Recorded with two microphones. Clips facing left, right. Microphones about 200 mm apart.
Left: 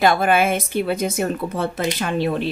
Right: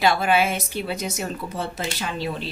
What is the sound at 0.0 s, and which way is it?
A woman's voice, 50° left (ahead or behind).